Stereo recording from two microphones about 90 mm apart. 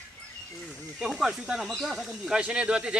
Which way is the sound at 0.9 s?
5° right (ahead or behind).